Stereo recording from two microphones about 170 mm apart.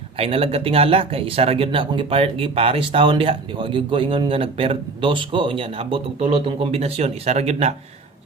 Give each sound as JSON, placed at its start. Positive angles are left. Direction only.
{"t": 0.2, "sound": "speech", "side_deg": -35}